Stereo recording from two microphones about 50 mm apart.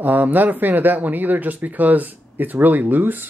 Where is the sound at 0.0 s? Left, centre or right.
Right.